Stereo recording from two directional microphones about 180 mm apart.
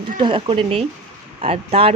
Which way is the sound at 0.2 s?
30° right (ahead or behind).